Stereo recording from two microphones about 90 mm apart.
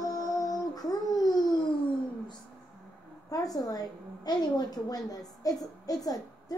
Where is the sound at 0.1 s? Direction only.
45° left (ahead or behind).